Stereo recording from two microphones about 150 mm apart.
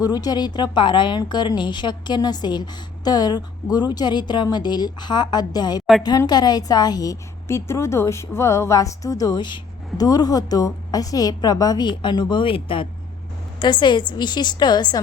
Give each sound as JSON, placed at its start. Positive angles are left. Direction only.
{"t": 0.0, "sound": "a woman's voice", "side_deg": 25}